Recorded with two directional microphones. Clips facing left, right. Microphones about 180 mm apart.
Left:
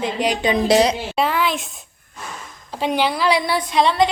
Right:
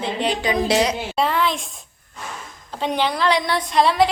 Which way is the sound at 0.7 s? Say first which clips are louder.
Left 5 dB; 35° left (ahead or behind).